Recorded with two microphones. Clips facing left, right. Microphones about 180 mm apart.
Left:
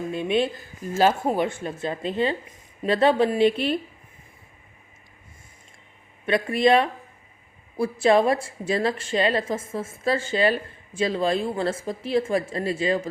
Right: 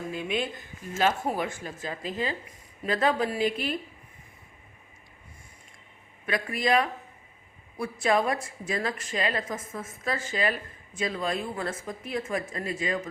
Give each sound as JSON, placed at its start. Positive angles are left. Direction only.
{"t": 0.1, "sound": "a woman's voice", "side_deg": 25}
{"t": 6.2, "sound": "a woman's voice", "side_deg": 30}